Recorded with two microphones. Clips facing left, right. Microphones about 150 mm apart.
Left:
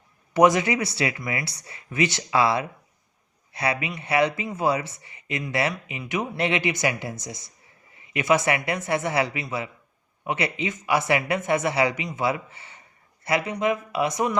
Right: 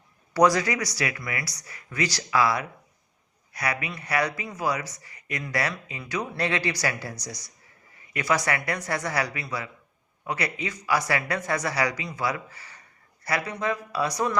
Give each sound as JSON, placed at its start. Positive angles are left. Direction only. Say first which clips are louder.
{"t": 0.3, "sound": "speech", "louder": "left 2 dB", "side_deg": 20}